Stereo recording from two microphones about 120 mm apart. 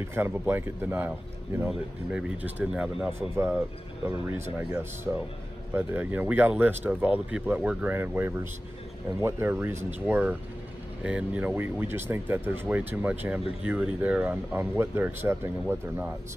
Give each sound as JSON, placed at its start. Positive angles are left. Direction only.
{"t": 0.1, "sound": "speech", "side_deg": -20}
{"t": 3.1, "sound": "speech", "side_deg": -20}